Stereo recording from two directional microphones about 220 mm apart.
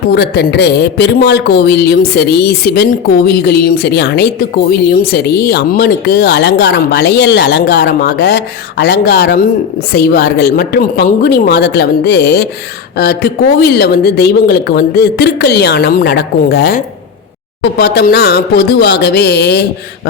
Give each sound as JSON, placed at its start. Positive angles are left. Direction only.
{"t": 0.1, "sound": "a man's voice", "side_deg": 50}